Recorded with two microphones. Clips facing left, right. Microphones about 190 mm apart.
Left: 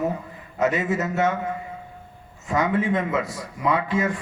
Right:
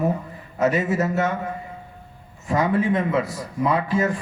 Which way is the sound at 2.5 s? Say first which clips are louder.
Right 2 dB; 35° right (ahead or behind).